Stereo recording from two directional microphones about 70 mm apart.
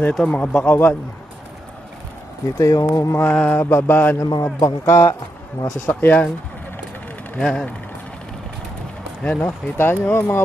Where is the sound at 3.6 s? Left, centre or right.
Left.